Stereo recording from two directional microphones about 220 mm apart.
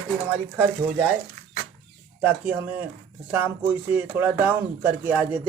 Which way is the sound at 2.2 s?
5° right (ahead or behind).